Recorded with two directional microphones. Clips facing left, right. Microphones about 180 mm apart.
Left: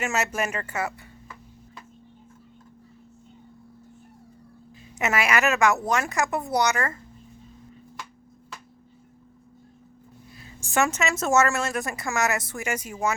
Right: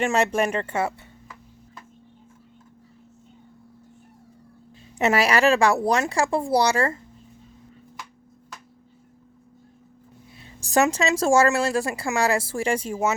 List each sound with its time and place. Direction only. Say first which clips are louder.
0.0 s speech: right 6 dB; 30° right (ahead or behind)
4.9 s speech: right 4 dB; 35° right (ahead or behind)
10.6 s speech: right 4 dB; 35° right (ahead or behind)